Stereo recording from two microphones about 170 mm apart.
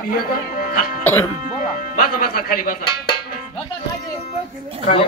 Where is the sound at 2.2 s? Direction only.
55° left (ahead or behind).